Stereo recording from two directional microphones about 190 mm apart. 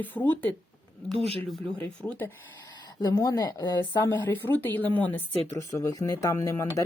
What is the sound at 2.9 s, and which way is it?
Speech, 20° left (ahead or behind).